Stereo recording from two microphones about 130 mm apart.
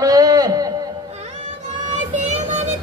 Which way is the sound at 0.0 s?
30° right (ahead or behind).